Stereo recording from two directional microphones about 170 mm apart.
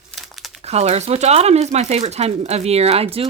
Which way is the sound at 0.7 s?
40° right (ahead or behind).